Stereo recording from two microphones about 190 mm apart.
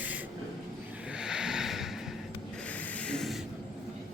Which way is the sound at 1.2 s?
5° right (ahead or behind).